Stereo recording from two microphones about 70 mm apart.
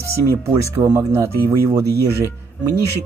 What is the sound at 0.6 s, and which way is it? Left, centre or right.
Speech, right.